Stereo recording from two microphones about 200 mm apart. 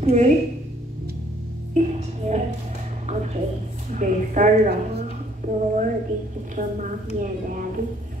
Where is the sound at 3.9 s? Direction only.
40° right (ahead or behind).